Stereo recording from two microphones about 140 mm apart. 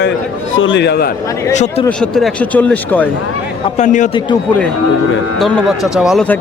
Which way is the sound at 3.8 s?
60° left (ahead or behind).